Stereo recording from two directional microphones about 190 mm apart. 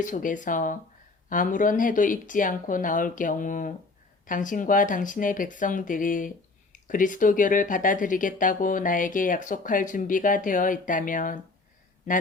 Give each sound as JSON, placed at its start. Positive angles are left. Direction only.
{"t": 0.0, "sound": "speech", "side_deg": 45}